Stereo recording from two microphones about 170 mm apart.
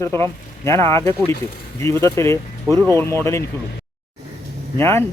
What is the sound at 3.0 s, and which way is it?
Speech, 15° left (ahead or behind).